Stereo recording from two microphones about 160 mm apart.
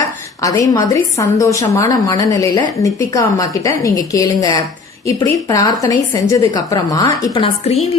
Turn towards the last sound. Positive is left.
turn(degrees=35)  # may be behind; listen again after turning